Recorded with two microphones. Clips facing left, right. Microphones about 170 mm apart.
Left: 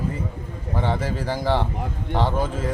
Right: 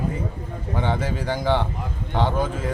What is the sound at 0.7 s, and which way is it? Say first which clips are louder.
Speech: even; centre (ahead or behind).